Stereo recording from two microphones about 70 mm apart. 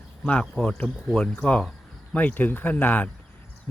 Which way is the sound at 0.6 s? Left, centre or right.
Centre.